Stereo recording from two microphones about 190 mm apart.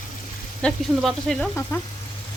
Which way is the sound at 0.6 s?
5° left (ahead or behind).